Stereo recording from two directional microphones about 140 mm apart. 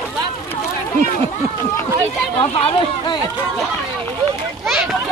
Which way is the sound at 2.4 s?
40° left (ahead or behind).